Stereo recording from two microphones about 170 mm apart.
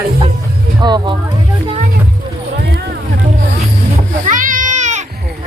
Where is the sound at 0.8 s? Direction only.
25° right (ahead or behind).